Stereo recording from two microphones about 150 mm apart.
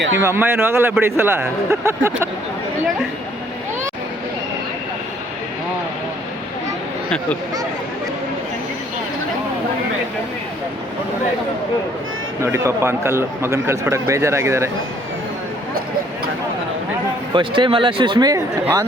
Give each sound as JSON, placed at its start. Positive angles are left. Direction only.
{"t": 0.1, "sound": "a man's voice", "side_deg": -15}
{"t": 12.4, "sound": "a man's voice", "side_deg": -20}
{"t": 17.3, "sound": "speech", "side_deg": -35}